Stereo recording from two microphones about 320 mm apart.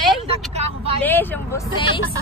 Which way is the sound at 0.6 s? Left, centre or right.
Centre.